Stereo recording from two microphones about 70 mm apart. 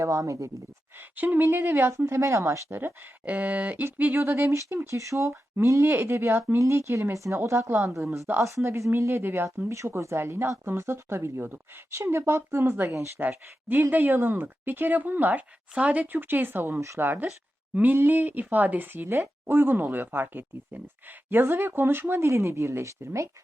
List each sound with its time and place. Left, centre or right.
0.0 s speech: right
1.1 s a woman's voice: right
4.2 s speech: right
9.7 s a woman's voice: right
22.3 s speech: right